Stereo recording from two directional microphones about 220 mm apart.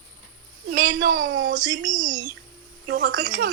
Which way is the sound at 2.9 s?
50° right (ahead or behind).